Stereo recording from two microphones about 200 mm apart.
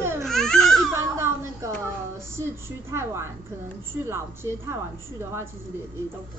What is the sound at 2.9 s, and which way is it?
Speech, 15° right (ahead or behind).